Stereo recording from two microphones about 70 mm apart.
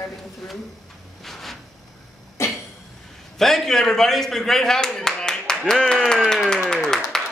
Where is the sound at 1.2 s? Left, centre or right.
Centre.